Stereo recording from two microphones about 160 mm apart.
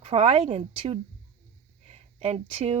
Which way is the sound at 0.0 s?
40° right (ahead or behind).